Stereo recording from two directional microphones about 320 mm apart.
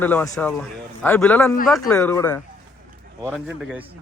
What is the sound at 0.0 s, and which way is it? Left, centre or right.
A man's voice, centre.